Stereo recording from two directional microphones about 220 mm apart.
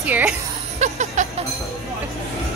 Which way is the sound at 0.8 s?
35° right (ahead or behind).